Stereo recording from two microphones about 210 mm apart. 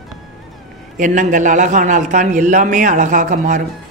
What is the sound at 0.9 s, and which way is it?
A man's voice, 40° right (ahead or behind).